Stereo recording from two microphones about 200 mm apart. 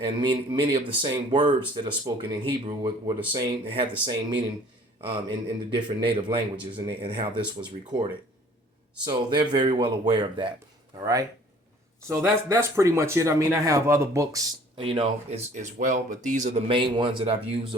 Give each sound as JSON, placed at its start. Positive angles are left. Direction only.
{"t": 0.0, "sound": "speech", "side_deg": -25}
{"t": 4.9, "sound": "speech", "side_deg": -25}
{"t": 9.3, "sound": "speech", "side_deg": -20}
{"t": 14.8, "sound": "speech", "side_deg": -25}